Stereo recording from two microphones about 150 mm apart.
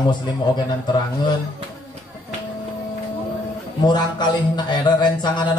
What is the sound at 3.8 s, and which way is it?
A man's voice, 30° left (ahead or behind).